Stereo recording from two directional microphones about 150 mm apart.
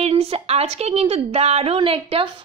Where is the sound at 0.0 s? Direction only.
40° right (ahead or behind).